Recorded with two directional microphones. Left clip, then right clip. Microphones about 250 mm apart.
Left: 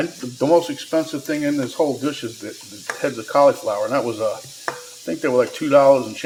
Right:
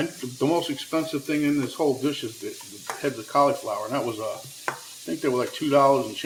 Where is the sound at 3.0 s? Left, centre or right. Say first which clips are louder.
Left 6 dB; left.